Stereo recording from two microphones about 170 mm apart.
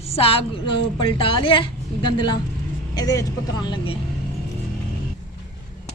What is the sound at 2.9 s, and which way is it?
Speech, 20° left (ahead or behind).